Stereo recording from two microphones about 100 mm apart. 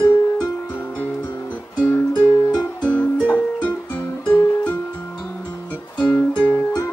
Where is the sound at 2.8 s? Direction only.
15° left (ahead or behind).